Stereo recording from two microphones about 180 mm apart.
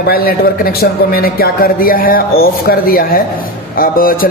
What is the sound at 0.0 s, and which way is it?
Speech, 55° left (ahead or behind).